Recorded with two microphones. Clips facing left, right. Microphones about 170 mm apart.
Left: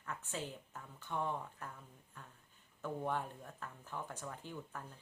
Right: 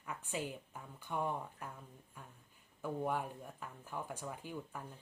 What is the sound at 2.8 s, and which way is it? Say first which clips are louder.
Speech: right 2 dB; 10° right (ahead or behind).